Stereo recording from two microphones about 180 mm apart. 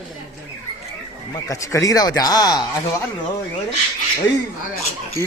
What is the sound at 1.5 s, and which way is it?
Speech, 20° left (ahead or behind).